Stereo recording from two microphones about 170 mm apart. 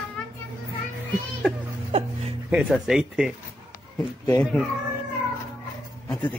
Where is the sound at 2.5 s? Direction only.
5° right (ahead or behind).